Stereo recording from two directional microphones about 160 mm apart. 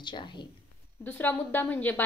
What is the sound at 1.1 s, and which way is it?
Speech, 10° left (ahead or behind).